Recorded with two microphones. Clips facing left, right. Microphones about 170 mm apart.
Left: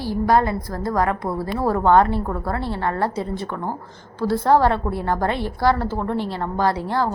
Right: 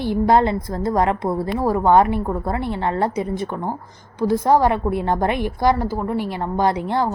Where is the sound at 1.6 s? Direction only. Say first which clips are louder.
Right 1 dB; 15° right (ahead or behind).